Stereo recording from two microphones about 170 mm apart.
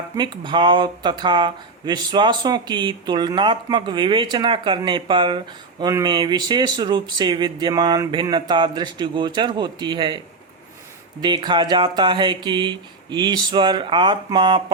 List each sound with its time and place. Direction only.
0.2 s speech: 25° right (ahead or behind)
11.2 s speech: 25° right (ahead or behind)